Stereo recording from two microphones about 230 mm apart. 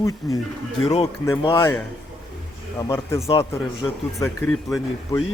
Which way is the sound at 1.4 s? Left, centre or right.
Centre.